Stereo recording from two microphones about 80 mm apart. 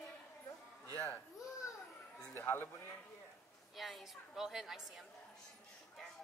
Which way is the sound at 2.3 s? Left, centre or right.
Left.